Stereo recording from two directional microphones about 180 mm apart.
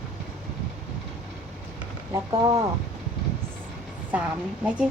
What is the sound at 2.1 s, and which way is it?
Speech, 15° right (ahead or behind).